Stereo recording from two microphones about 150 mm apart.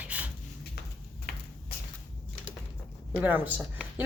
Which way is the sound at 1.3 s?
90° left.